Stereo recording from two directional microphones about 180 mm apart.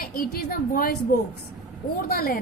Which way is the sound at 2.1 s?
55° left (ahead or behind).